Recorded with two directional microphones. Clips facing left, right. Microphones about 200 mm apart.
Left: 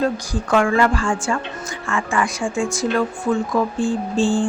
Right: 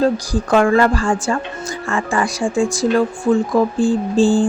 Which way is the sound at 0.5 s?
35° right (ahead or behind).